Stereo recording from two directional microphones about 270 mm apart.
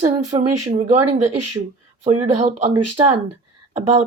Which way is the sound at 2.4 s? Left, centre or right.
Right.